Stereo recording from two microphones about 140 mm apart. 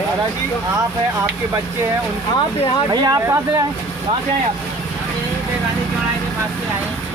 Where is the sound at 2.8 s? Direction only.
25° right (ahead or behind).